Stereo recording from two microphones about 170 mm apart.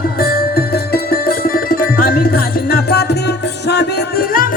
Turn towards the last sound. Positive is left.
turn(degrees=60)  # may be behind; listen again after turning